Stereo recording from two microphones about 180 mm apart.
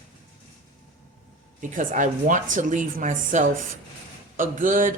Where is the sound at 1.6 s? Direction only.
45° right (ahead or behind).